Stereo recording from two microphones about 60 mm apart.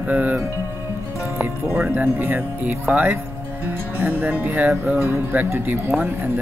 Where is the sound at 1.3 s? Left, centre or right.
Right.